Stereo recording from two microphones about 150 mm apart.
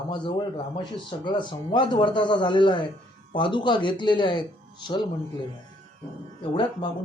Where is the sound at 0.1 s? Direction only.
35° left (ahead or behind).